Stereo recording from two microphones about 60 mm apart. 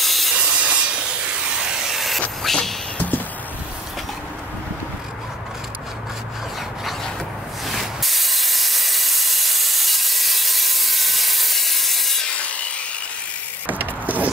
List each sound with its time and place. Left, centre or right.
0.0 s wood: centre
0.4 s wood: centre
2.4 s a sound: centre
7.6 s steam: centre
12.4 s wood: left
13.7 s a sound: right